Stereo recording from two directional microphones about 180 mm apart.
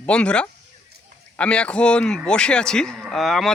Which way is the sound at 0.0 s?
5° left (ahead or behind).